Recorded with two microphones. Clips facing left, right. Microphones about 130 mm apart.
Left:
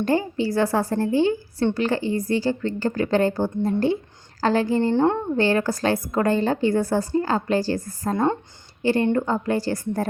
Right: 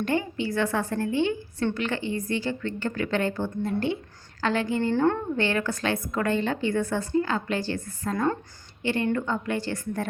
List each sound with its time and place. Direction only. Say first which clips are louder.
0.0 s a woman's voice: left 5 dB; 35° left (ahead or behind)
5.4 s a woman's voice: left 5 dB; 35° left (ahead or behind)
8.1 s speech: left 4 dB; 25° left (ahead or behind)
8.8 s a woman's voice: left 6 dB; 35° left (ahead or behind)